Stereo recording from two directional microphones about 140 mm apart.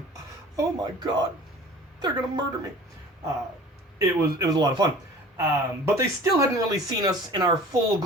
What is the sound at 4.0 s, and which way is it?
Speech, 25° right (ahead or behind).